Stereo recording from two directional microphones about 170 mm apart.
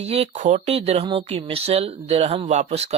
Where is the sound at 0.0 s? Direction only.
40° right (ahead or behind).